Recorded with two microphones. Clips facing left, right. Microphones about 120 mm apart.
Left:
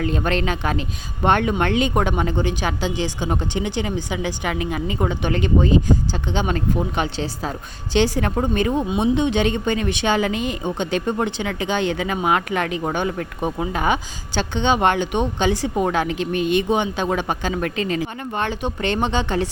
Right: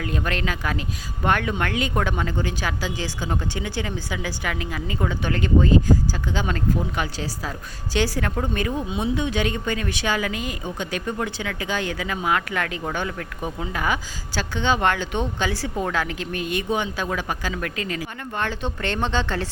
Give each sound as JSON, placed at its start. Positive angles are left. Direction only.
{"t": 0.0, "sound": "a woman's voice", "side_deg": 25}